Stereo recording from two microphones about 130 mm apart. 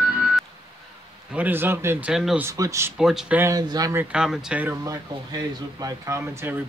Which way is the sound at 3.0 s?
5° right (ahead or behind).